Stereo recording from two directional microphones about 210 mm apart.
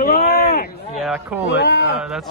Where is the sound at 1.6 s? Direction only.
55° left (ahead or behind).